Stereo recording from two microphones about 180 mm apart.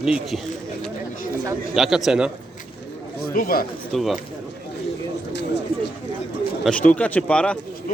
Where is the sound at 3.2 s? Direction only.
55° left (ahead or behind).